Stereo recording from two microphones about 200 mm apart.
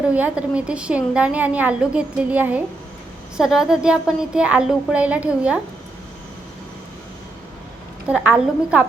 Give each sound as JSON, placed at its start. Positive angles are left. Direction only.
{"t": 0.1, "sound": "a woman's voice", "side_deg": -5}
{"t": 8.0, "sound": "a woman's voice", "side_deg": -5}